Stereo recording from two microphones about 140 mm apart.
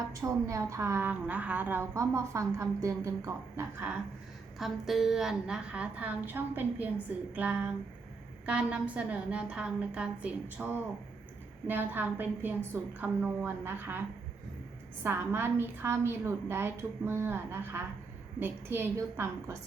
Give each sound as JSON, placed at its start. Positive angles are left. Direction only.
{"t": 0.1, "sound": "a woman's voice", "side_deg": -25}
{"t": 4.5, "sound": "a woman's voice", "side_deg": 0}
{"t": 15.0, "sound": "a woman's voice", "side_deg": -15}